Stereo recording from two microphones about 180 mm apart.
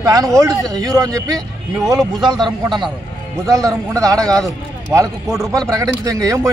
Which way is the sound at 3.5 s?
20° right (ahead or behind).